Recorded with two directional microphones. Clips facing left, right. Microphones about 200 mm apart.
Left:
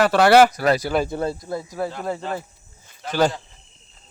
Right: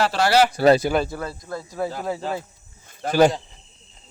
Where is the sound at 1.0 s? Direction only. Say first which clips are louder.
Left 5 dB; 25° left (ahead or behind).